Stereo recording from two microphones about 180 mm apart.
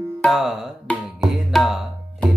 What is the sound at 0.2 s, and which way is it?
Tabla, centre (ahead or behind).